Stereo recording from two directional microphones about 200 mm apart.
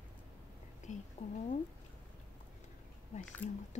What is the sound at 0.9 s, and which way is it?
Speech, 35° left (ahead or behind).